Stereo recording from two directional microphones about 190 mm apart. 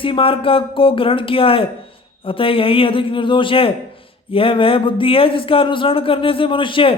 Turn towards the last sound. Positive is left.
turn(degrees=25)  # may be behind; listen again after turning